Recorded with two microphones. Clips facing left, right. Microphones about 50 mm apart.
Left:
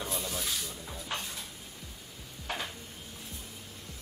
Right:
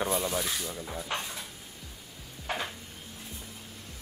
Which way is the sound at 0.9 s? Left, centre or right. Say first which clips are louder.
Right 2 dB; right.